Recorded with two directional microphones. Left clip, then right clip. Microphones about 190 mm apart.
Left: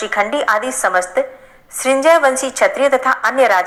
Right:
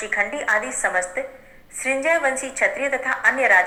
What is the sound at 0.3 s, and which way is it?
Speech, 50° left (ahead or behind).